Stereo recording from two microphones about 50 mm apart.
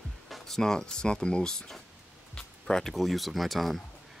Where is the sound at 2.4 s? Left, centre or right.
Centre.